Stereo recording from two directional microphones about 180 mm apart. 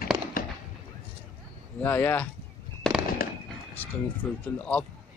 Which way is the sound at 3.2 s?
55° left (ahead or behind).